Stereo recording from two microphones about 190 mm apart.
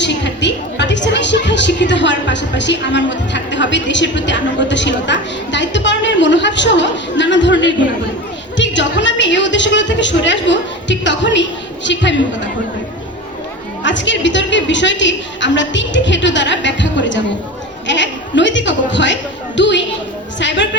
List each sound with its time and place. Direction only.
0.0 s a woman's voice: 65° left (ahead or behind)
13.8 s a woman's voice: 70° left (ahead or behind)